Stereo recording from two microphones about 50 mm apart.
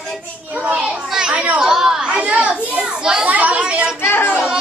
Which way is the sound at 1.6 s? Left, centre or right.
Centre.